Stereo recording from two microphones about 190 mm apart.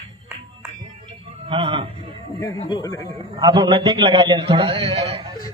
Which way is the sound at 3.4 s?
20° right (ahead or behind).